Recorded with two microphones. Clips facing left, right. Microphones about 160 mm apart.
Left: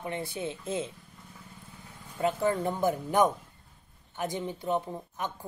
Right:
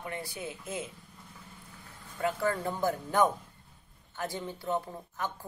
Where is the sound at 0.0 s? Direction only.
25° left (ahead or behind).